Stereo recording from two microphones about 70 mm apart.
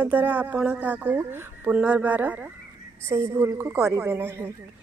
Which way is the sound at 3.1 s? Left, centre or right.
Right.